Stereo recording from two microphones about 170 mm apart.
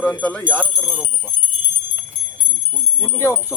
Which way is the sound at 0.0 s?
10° left (ahead or behind).